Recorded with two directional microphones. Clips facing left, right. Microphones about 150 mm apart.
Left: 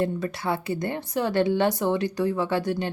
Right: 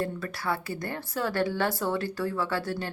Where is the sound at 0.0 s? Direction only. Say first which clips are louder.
Left 5 dB; 20° left (ahead or behind).